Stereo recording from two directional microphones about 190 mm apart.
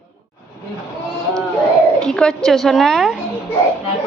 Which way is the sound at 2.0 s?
5° left (ahead or behind).